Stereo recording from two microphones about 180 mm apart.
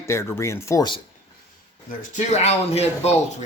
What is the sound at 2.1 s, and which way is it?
Speech, 40° left (ahead or behind).